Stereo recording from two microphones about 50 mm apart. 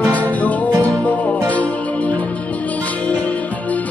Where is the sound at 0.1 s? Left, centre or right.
Left.